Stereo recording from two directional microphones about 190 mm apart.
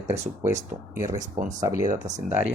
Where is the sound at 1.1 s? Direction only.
40° right (ahead or behind).